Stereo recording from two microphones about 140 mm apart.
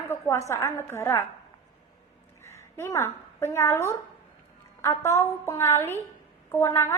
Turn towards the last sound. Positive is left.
turn(degrees=20)  # may be behind; listen again after turning